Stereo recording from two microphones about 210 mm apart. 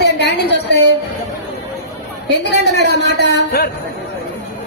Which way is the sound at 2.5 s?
55° left (ahead or behind).